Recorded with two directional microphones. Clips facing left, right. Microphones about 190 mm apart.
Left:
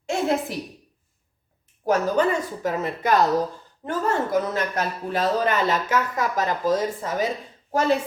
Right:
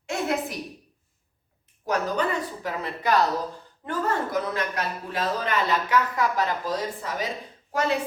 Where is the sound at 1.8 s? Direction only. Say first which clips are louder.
Left 5 dB; 45° left (ahead or behind).